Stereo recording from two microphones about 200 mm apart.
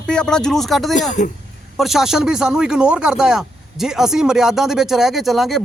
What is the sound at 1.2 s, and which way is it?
Speech, 35° left (ahead or behind).